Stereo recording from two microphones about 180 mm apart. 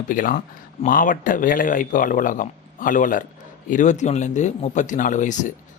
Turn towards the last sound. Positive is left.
turn(degrees=45)  # may be behind; listen again after turning